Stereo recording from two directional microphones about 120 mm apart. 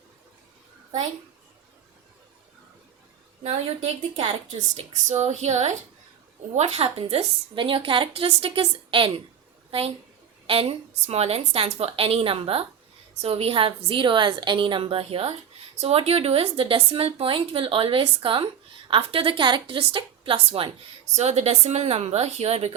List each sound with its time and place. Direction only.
3.4 s a woman's voice: 60° right (ahead or behind)
5.0 s a woman's voice: 70° right (ahead or behind); by 9.1 s 45° right (ahead or behind)
10.4 s a woman's voice: 50° right (ahead or behind)
21.2 s a woman's voice: 60° right (ahead or behind)